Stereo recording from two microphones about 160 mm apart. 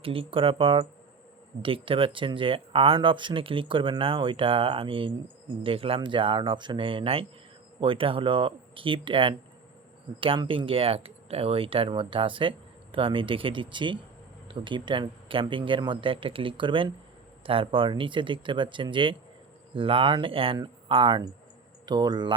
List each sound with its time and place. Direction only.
0.0 s speech: 35° right (ahead or behind)